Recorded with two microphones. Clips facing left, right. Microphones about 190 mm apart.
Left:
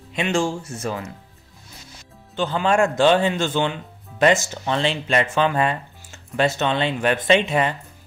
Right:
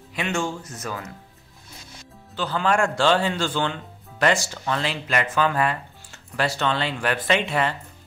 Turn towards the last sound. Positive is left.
turn(degrees=20)  # may be behind; listen again after turning